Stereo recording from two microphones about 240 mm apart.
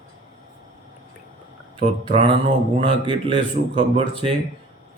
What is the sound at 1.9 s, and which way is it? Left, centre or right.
Mantra, right.